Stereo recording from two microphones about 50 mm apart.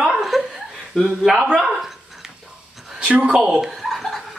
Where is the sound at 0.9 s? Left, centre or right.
Centre.